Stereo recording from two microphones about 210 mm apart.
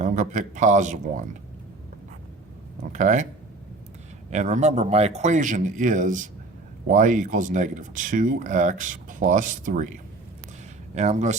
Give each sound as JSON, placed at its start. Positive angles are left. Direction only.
{"t": 0.0, "sound": "speech", "side_deg": -35}
{"t": 2.9, "sound": "speech", "side_deg": -35}
{"t": 4.3, "sound": "speech", "side_deg": -35}
{"t": 10.9, "sound": "speech", "side_deg": -35}